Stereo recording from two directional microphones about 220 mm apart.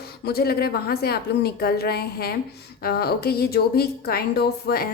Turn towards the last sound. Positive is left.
turn(degrees=45)  # may be behind; listen again after turning